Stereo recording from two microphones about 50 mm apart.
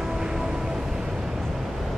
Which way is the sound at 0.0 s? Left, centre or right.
Centre.